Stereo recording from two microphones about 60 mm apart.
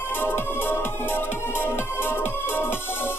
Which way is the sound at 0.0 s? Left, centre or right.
Left.